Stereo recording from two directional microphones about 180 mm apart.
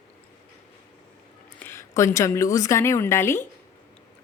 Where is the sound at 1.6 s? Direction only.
15° left (ahead or behind).